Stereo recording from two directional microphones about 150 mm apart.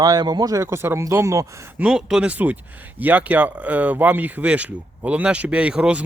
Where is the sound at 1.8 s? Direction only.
5° right (ahead or behind).